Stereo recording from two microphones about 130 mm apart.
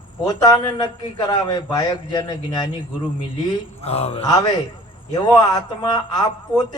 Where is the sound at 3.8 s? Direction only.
50° left (ahead or behind).